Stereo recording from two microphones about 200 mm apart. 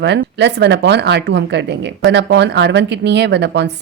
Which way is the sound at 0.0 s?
60° right (ahead or behind).